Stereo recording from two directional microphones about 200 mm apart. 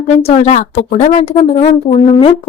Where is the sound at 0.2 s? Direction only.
35° left (ahead or behind).